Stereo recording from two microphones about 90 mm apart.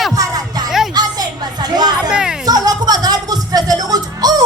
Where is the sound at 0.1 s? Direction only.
40° right (ahead or behind).